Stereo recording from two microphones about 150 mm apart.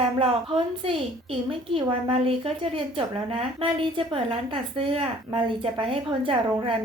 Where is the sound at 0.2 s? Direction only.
40° right (ahead or behind).